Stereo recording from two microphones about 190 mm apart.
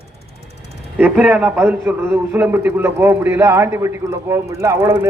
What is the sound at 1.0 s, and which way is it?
A man's voice, 5° right (ahead or behind).